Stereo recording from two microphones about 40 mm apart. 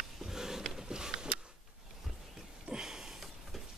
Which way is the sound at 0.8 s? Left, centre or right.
Centre.